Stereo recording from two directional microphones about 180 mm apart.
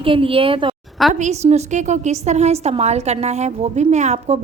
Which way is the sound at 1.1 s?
40° right (ahead or behind).